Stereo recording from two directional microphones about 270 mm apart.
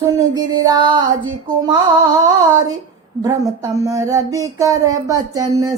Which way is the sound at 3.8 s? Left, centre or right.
Centre.